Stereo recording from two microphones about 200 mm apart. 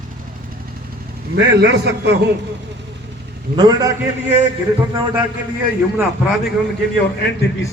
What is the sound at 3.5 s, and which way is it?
Speech, 20° right (ahead or behind).